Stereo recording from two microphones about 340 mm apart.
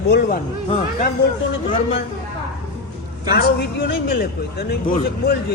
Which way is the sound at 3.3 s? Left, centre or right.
Left.